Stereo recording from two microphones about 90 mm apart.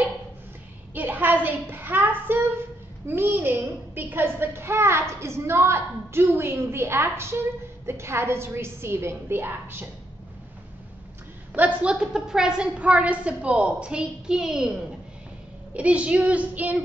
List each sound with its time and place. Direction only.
0.9 s a sound: 20° right (ahead or behind)
5.2 s a woman's voice: 30° right (ahead or behind)
11.5 s a woman's voice: 15° right (ahead or behind)
15.7 s a woman's voice: 15° right (ahead or behind)